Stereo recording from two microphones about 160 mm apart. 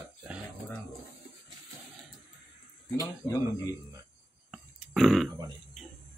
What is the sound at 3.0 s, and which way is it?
Speech, 20° left (ahead or behind).